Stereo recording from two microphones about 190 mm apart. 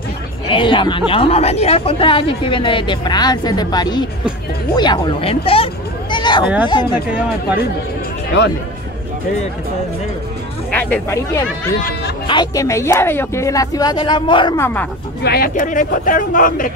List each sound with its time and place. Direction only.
0.5 s speech: 25° left (ahead or behind)
10.7 s speech: 10° left (ahead or behind); by 14.5 s 25° left (ahead or behind)
14.6 s speech: 10° left (ahead or behind)
15.2 s speech: 50° left (ahead or behind)